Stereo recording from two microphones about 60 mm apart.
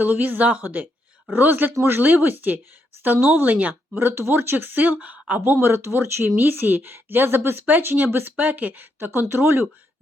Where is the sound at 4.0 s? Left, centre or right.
Right.